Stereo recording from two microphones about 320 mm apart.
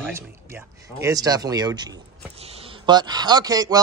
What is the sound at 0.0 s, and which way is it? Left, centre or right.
Speech, centre.